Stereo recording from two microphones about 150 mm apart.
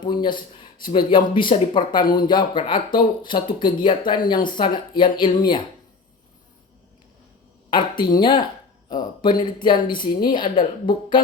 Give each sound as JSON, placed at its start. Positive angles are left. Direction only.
{"t": 0.0, "sound": "speech", "side_deg": 30}
{"t": 7.7, "sound": "speech", "side_deg": 30}